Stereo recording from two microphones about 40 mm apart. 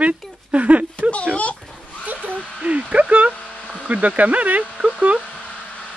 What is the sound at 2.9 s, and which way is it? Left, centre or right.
Speech, right.